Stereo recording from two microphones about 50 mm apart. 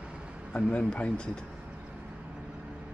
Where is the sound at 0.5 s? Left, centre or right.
Left.